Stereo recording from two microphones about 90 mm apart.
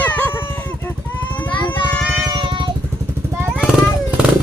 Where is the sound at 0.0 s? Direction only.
20° left (ahead or behind).